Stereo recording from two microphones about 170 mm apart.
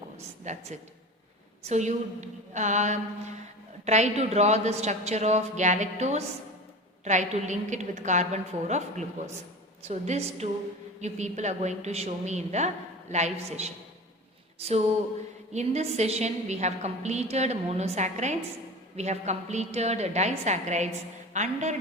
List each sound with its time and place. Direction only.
0.2 s a woman's voice: 40° right (ahead or behind)
15.5 s a woman's voice: 40° right (ahead or behind)